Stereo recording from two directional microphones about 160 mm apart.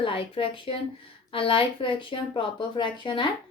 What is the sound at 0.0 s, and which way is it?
Speech, 35° left (ahead or behind).